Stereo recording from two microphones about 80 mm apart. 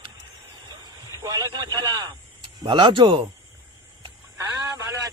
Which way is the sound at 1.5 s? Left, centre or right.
Right.